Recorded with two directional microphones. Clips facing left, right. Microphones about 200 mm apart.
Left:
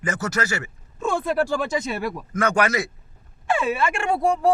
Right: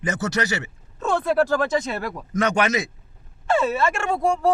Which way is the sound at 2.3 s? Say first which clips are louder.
Right 1 dB; 20° right (ahead or behind).